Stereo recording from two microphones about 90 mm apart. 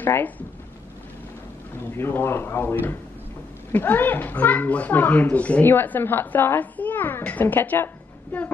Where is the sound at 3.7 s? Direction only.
20° left (ahead or behind).